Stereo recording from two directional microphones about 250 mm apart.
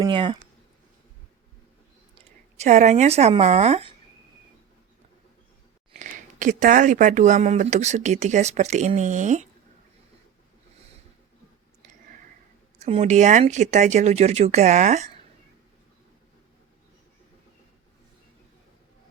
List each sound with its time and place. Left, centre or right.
0.0 s speech: centre
2.1 s speech: right
6.0 s speech: right
12.8 s speech: right